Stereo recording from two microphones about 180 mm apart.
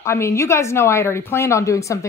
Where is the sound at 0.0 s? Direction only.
15° left (ahead or behind).